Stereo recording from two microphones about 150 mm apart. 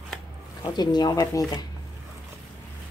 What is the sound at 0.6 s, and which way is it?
Speech, 30° left (ahead or behind).